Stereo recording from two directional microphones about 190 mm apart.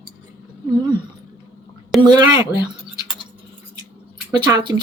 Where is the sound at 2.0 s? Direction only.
20° right (ahead or behind).